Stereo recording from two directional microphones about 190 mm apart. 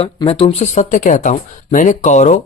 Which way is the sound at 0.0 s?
30° left (ahead or behind).